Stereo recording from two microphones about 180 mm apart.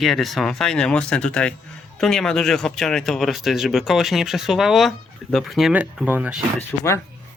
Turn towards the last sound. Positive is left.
turn(degrees=15)  # may be behind; listen again after turning